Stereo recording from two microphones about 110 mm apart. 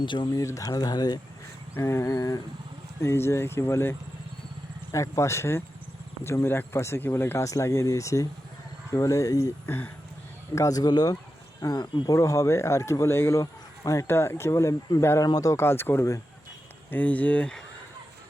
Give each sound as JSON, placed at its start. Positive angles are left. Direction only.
{"t": 0.0, "sound": "speech", "side_deg": 45}
{"t": 0.4, "sound": "speech", "side_deg": 30}
{"t": 1.7, "sound": "speech", "side_deg": 25}
{"t": 9.6, "sound": "speech", "side_deg": 20}
{"t": 10.5, "sound": "speech", "side_deg": 30}
{"t": 16.9, "sound": "speech", "side_deg": 15}